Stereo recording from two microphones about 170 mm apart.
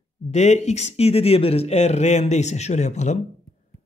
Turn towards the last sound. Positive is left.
turn(degrees=45)  # may be behind; listen again after turning